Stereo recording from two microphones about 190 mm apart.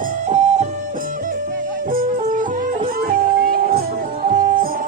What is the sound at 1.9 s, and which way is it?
Music, 45° right (ahead or behind).